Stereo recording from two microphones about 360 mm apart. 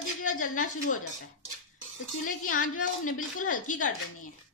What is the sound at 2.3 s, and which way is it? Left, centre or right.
A woman's voice, left.